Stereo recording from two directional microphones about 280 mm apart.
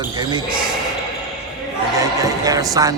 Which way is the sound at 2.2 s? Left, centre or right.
Centre.